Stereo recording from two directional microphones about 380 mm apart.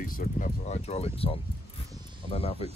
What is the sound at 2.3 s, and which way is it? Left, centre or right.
Speech, centre.